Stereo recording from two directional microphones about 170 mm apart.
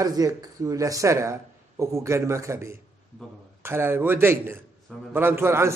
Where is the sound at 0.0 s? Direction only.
20° right (ahead or behind).